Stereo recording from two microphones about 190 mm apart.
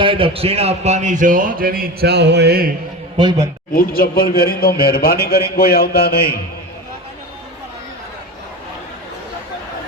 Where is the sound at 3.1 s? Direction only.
25° right (ahead or behind).